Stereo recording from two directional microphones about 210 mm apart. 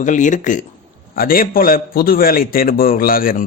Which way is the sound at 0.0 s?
35° left (ahead or behind).